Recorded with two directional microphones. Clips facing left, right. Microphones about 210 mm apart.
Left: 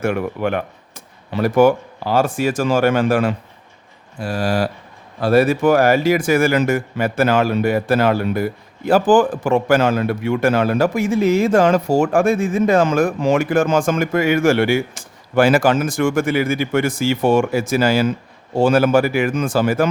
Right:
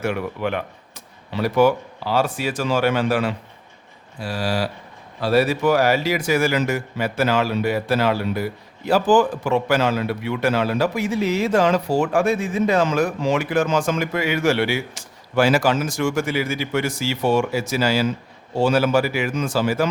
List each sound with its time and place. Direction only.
0.0 s speech: 50° left (ahead or behind)